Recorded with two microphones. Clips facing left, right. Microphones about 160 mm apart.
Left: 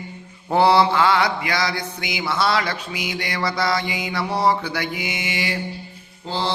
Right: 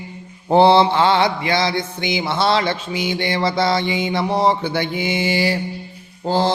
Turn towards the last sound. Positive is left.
turn(degrees=-45)  # may be behind; listen again after turning